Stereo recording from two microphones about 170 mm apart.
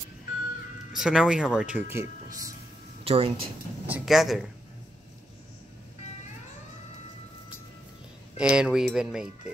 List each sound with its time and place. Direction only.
0.9 s speech: 5° right (ahead or behind)
1.9 s speech: 15° right (ahead or behind)
3.0 s speech: 35° right (ahead or behind)
3.8 s speech: 5° right (ahead or behind)
8.4 s speech: 5° right (ahead or behind)